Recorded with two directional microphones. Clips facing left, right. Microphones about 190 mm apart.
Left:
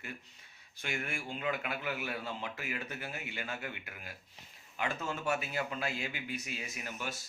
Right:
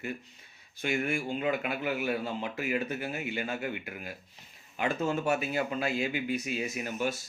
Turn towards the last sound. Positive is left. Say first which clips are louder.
# right 9 dB
turn(degrees=-20)  # may be behind; listen again after turning